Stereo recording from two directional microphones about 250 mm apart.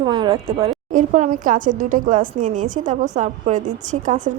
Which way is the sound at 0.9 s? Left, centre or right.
Right.